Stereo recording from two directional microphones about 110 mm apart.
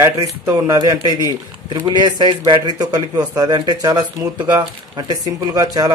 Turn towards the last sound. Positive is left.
turn(degrees=-35)  # may be behind; listen again after turning